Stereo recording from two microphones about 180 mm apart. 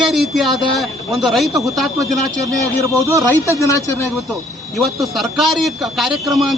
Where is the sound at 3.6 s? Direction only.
15° left (ahead or behind).